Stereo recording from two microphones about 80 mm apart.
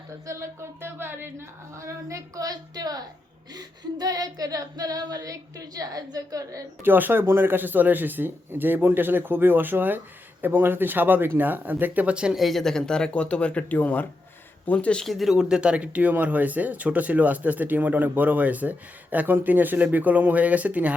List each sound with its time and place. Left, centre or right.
0.3 s speech: right
3.5 s female singing: right
6.8 s speech: right
12.4 s speech: centre
15.0 s speech: centre